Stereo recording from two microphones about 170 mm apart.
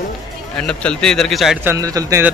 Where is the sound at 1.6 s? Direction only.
15° right (ahead or behind).